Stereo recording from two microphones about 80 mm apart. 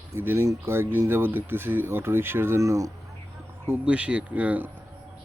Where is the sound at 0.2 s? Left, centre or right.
Right.